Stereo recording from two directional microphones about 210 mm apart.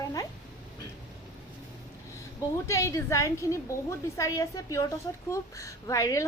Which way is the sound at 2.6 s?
15° left (ahead or behind).